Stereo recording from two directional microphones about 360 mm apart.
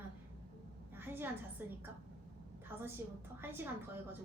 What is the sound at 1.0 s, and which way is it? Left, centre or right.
Speech, centre.